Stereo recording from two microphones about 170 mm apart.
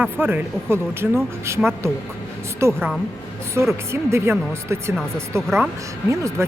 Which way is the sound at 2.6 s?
15° right (ahead or behind).